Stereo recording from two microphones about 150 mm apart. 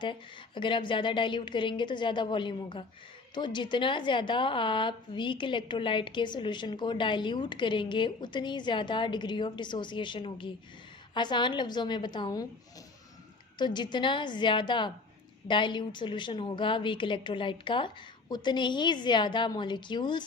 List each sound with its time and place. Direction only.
0.0 s a woman's voice: 35° left (ahead or behind)
13.6 s a woman's voice: 30° left (ahead or behind)